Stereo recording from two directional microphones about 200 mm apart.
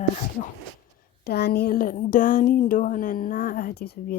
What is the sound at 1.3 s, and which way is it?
Speech, 55° left (ahead or behind).